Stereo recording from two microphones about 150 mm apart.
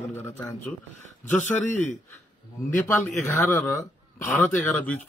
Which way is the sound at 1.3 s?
55° left (ahead or behind).